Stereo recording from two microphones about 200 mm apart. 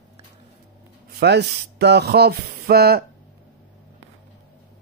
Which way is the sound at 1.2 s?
55° right (ahead or behind).